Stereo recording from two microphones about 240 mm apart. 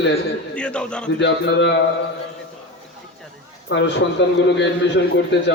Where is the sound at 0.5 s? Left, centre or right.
Centre.